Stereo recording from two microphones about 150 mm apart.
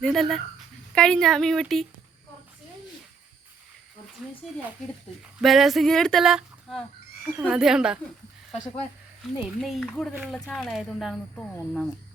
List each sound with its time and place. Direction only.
0.0 s speech: centre (ahead or behind)
4.4 s speech: 5° left (ahead or behind)
9.6 s speech: centre (ahead or behind)